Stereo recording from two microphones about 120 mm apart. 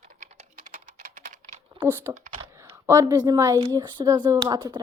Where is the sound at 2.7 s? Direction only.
25° right (ahead or behind).